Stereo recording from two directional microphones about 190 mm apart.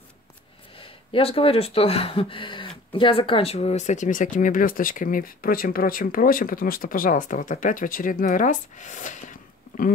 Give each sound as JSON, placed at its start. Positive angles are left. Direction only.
{"t": 0.7, "sound": "speech", "side_deg": 30}